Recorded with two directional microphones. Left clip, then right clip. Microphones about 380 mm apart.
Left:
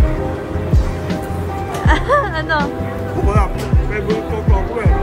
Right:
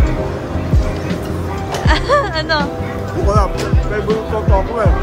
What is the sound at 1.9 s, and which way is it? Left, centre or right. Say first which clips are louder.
Speech: right 1 dB; centre.